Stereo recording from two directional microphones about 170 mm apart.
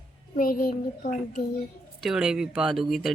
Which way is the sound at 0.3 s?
55° left (ahead or behind).